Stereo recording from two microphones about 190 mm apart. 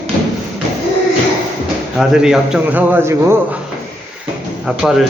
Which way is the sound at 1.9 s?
5° right (ahead or behind).